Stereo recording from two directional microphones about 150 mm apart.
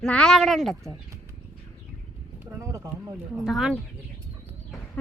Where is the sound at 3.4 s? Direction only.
5° right (ahead or behind).